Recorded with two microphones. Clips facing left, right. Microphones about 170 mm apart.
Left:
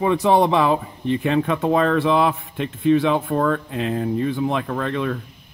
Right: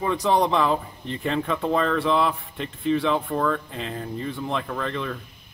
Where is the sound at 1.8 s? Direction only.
5° left (ahead or behind).